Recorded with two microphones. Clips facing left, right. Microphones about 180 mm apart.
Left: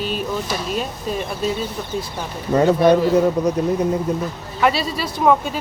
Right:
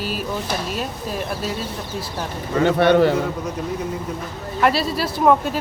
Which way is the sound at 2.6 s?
70° right (ahead or behind).